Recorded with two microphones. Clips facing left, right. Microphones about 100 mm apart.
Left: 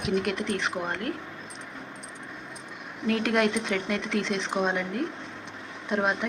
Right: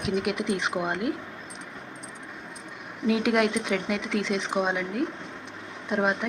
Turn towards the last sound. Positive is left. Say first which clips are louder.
# right 1 dB
turn(degrees=0)  # may be behind; listen again after turning